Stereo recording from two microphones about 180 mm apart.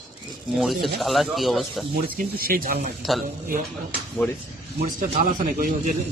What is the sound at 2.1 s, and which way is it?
Speech, 55° right (ahead or behind).